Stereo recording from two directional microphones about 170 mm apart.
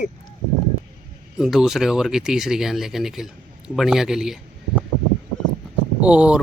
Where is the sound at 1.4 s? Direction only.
5° right (ahead or behind).